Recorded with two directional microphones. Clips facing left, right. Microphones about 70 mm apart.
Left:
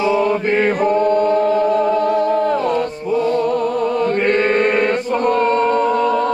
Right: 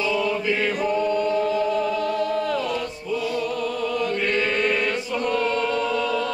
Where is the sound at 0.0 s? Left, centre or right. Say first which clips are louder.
Left 7 dB; left.